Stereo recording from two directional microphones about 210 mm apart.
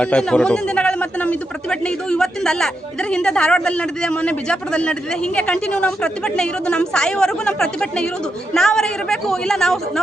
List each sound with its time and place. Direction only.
0.0 s speech: 5° left (ahead or behind)